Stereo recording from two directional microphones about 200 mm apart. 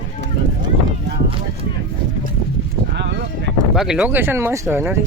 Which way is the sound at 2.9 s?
60° right (ahead or behind).